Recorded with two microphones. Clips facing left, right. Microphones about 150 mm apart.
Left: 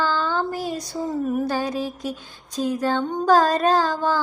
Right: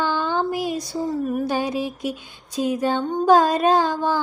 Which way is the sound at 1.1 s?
Centre (ahead or behind).